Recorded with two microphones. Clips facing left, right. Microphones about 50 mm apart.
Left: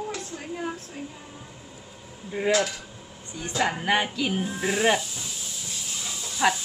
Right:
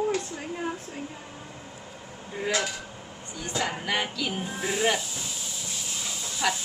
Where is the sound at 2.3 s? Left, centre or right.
Centre.